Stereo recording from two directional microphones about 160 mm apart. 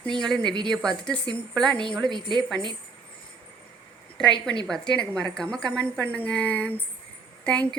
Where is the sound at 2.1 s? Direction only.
30° right (ahead or behind).